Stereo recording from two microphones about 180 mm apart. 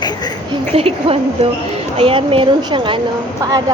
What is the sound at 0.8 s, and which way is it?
A woman's voice, 30° right (ahead or behind).